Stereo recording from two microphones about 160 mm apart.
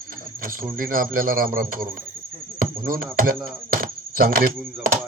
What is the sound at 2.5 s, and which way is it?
Chop, 60° right (ahead or behind).